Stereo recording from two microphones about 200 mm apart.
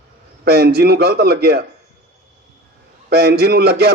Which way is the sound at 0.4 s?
55° right (ahead or behind).